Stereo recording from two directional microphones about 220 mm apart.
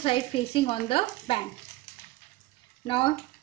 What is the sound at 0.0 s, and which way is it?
Speech, 25° left (ahead or behind).